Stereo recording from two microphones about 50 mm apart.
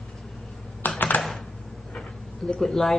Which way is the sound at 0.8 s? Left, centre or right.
Left.